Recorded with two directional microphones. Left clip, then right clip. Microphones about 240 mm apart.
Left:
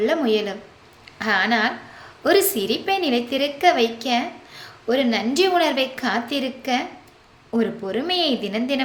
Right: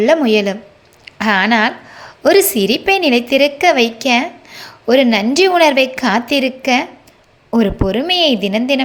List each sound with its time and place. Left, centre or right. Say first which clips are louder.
0.0 s a woman's voice: right 8 dB; right